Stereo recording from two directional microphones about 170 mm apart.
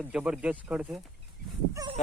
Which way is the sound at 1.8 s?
20° right (ahead or behind).